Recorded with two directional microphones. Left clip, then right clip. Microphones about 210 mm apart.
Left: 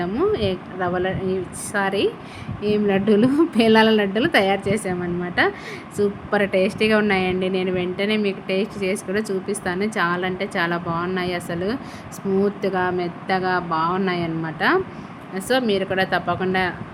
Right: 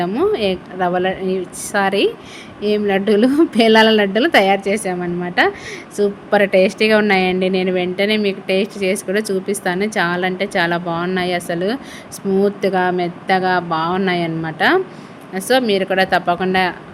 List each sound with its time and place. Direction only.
0.0 s a woman's voice: 20° right (ahead or behind)